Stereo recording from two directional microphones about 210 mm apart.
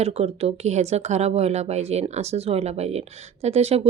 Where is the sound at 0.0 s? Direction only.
30° right (ahead or behind).